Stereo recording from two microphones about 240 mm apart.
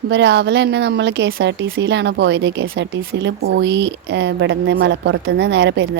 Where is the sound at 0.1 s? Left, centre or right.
Right.